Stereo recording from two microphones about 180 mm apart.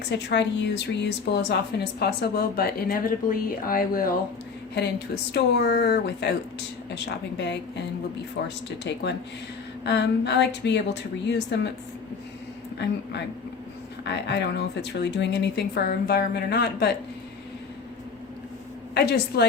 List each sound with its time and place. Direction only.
0.1 s speech: 75° left (ahead or behind); by 4.1 s 55° left (ahead or behind)
5.3 s speech: 65° left (ahead or behind)
14.0 s speech: 70° left (ahead or behind)
18.9 s speech: 65° left (ahead or behind)